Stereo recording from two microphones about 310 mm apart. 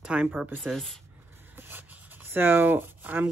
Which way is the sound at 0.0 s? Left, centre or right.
Centre.